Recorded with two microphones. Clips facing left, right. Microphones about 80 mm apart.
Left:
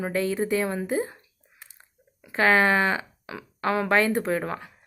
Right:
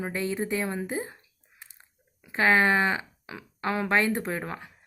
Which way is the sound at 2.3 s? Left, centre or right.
Centre.